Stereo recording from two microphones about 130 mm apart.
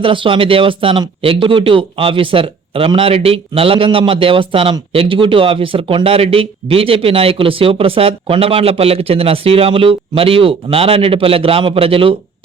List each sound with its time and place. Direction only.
0.0 s speech: 40° right (ahead or behind)